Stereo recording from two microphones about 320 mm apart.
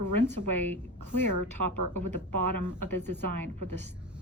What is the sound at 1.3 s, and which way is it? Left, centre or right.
Speech, right.